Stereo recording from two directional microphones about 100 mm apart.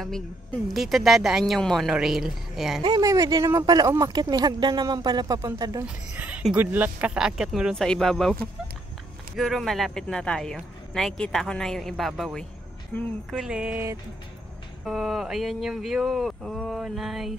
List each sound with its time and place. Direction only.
0.7 s speech: centre (ahead or behind)
3.0 s speech: 35° right (ahead or behind)
6.1 s a sound: 15° right (ahead or behind)
6.4 s speech: 15° right (ahead or behind)
7.7 s speech: 5° left (ahead or behind)
9.4 s speech: centre (ahead or behind)
14.9 s speech: 5° right (ahead or behind)